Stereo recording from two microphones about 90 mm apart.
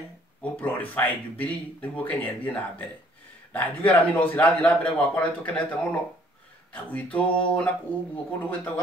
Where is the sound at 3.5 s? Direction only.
20° left (ahead or behind).